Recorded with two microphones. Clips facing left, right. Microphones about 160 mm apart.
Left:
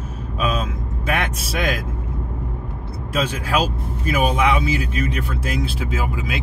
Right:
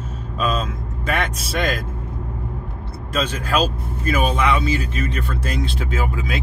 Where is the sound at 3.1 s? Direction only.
10° left (ahead or behind).